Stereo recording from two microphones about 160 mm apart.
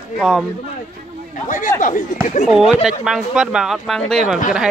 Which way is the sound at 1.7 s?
55° left (ahead or behind).